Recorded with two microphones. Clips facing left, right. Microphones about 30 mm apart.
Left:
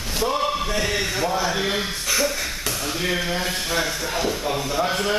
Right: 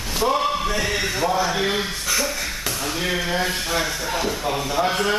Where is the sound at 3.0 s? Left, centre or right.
Centre.